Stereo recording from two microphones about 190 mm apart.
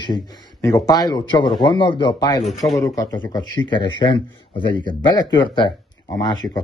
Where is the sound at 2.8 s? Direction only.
20° left (ahead or behind).